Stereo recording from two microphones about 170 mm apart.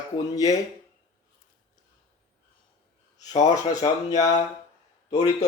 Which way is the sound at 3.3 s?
45° left (ahead or behind).